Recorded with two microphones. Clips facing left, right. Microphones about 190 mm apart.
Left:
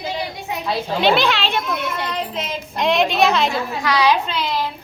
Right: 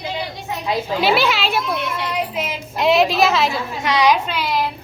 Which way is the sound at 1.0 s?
5° right (ahead or behind).